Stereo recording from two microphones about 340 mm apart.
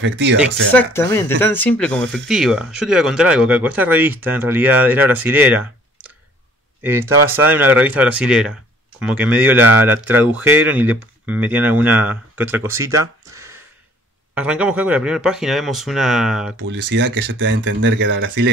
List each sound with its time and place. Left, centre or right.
0.0 s speech: right
0.7 s speech: centre
16.5 s speech: right